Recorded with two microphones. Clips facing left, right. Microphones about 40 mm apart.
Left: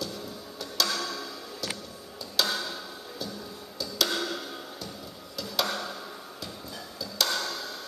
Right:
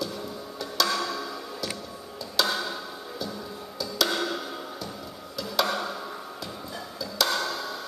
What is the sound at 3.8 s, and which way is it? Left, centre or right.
Tick-tock, centre.